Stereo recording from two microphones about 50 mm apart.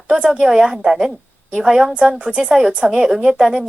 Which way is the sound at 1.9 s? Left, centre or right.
Right.